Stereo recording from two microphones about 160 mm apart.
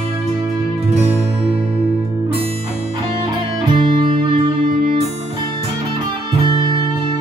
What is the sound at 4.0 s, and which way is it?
Music, 30° right (ahead or behind).